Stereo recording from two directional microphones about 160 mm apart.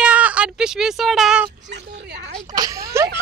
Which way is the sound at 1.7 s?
90° right.